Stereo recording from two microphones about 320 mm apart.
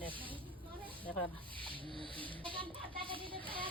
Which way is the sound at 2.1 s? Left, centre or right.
Centre.